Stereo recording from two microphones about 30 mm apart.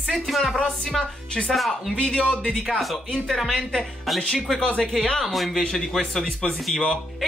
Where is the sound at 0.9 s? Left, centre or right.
Centre.